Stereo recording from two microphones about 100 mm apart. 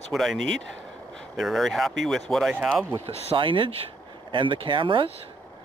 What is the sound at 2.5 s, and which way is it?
Speech, 15° right (ahead or behind).